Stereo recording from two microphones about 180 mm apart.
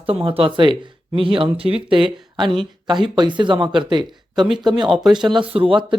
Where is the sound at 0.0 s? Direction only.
30° right (ahead or behind).